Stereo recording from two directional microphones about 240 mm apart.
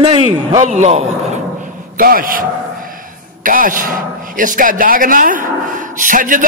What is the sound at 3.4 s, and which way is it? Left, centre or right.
A man's voice, right.